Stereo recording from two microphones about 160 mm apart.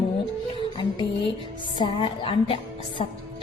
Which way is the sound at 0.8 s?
30° left (ahead or behind).